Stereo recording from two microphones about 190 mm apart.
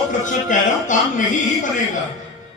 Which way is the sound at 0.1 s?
40° left (ahead or behind).